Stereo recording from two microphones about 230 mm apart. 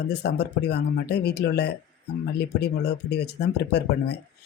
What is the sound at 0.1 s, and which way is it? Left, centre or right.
Speech, left.